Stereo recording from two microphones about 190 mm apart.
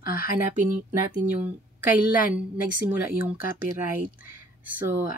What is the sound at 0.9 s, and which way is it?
Speech, 10° right (ahead or behind).